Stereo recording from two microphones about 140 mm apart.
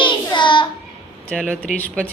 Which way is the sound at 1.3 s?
5° left (ahead or behind).